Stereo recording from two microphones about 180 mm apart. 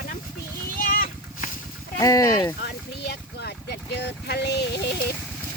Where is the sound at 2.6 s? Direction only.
65° left (ahead or behind).